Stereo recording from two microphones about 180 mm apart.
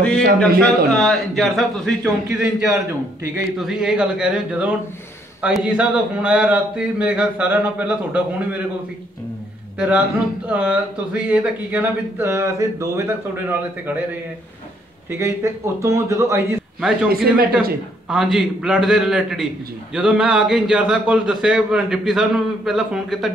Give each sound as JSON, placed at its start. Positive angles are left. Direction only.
{"t": 0.4, "sound": "a man's voice", "side_deg": 5}
{"t": 9.8, "sound": "speech", "side_deg": -10}
{"t": 15.0, "sound": "speech", "side_deg": -15}
{"t": 17.1, "sound": "speech", "side_deg": -55}
{"t": 18.0, "sound": "a man's voice", "side_deg": 0}